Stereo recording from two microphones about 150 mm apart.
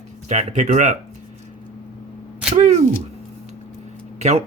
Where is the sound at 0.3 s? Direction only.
50° right (ahead or behind).